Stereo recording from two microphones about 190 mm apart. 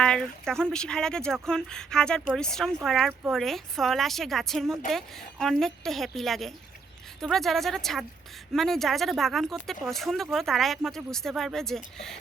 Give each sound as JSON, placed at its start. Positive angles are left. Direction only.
{"t": 0.0, "sound": "speech", "side_deg": 5}